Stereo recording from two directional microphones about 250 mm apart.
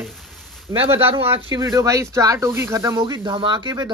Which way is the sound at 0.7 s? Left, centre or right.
Centre.